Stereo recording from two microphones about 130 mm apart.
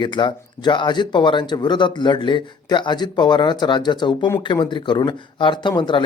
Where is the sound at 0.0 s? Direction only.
35° left (ahead or behind).